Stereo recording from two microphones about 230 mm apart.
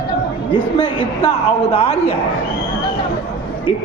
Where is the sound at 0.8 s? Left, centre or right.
Left.